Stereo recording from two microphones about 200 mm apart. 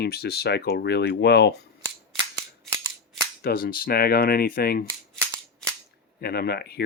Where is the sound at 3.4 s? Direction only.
50° left (ahead or behind).